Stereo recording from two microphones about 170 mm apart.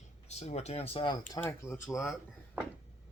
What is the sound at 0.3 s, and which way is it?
Speech, 40° left (ahead or behind).